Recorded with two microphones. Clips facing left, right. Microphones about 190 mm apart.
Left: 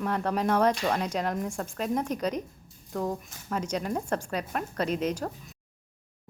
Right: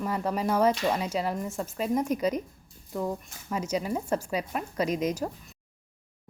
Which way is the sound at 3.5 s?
10° right (ahead or behind).